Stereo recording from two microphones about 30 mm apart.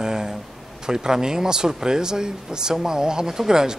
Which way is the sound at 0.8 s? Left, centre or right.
Right.